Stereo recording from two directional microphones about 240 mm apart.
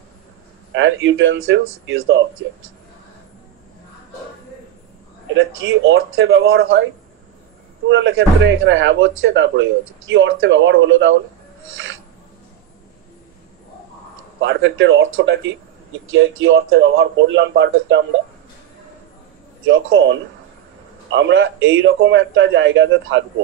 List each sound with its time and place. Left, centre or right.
0.7 s speech: right
5.3 s speech: right
7.9 s speech: right
11.7 s filing: right
14.4 s speech: right
19.6 s speech: right